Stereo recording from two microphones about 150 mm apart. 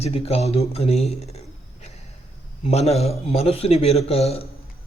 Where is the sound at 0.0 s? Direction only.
40° left (ahead or behind).